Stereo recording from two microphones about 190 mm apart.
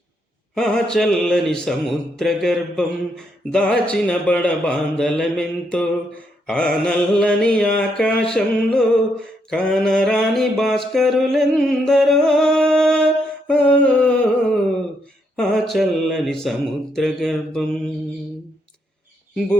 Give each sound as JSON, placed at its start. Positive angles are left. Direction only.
{"t": 0.5, "sound": "speech", "side_deg": 5}